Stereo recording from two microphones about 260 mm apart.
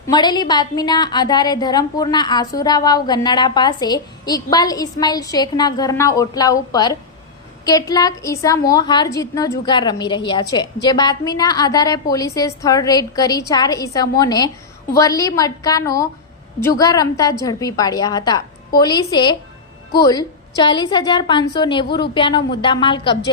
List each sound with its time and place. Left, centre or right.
0.1 s a woman's voice: centre